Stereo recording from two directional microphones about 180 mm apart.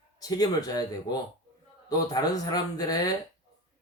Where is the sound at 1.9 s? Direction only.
20° left (ahead or behind).